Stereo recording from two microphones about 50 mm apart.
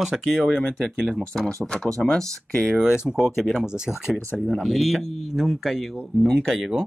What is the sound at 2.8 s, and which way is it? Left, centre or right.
Speech, centre.